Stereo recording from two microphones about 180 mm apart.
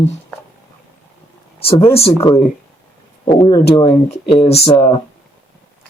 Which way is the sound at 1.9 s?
30° left (ahead or behind).